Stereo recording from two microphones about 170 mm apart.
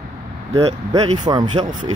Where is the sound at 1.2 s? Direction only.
25° right (ahead or behind).